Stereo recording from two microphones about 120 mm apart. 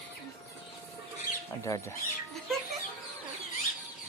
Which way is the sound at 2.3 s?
Centre (ahead or behind).